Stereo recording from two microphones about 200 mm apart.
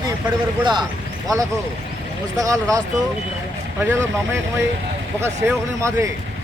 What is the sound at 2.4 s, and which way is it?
Speech, 15° right (ahead or behind).